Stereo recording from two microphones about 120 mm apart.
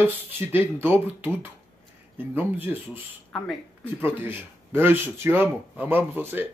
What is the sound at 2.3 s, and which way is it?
Speech, 15° right (ahead or behind).